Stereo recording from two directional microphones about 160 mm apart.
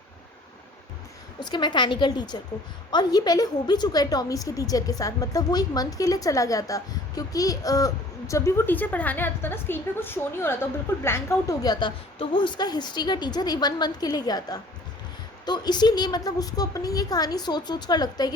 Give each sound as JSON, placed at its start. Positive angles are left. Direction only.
{"t": 1.4, "sound": "a woman's voice", "side_deg": 30}